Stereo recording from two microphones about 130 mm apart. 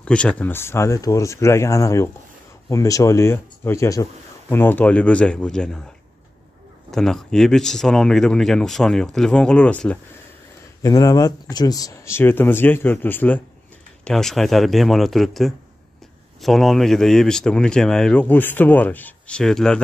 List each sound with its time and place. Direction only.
0.0 s speech: 10° left (ahead or behind)
6.9 s speech: 5° left (ahead or behind)
10.8 s speech: 30° left (ahead or behind); by 13.4 s 15° left (ahead or behind)
14.0 s speech: 5° left (ahead or behind)